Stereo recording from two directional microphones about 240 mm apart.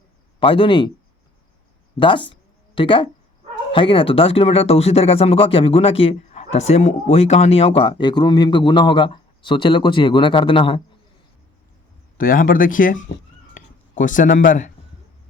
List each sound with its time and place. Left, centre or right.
0.3 s speech: left
2.0 s speech: centre
12.1 s speech: left
13.5 s a sound: left